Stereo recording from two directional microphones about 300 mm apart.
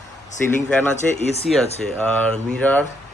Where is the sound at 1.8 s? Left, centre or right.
Centre.